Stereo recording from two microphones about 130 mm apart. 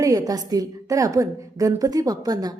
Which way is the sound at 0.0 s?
25° right (ahead or behind).